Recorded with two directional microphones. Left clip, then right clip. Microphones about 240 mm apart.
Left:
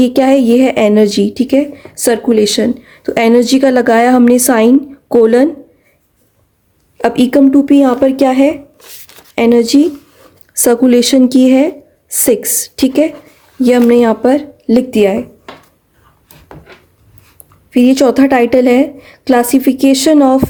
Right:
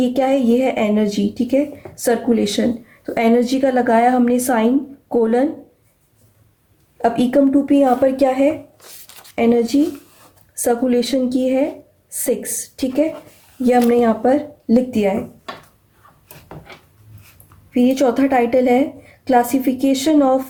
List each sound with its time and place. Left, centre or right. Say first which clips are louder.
0.0 s speech: left 7 dB; left
7.0 s speech: left 6 dB; left
17.7 s speech: left 7 dB; left